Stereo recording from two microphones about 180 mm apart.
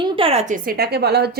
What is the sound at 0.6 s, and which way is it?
Speech, 60° right (ahead or behind).